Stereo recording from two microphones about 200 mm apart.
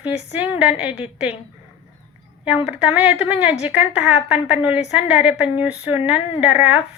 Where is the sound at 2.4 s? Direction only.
10° right (ahead or behind).